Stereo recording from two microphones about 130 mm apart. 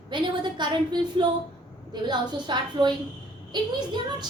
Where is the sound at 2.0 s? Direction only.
35° right (ahead or behind).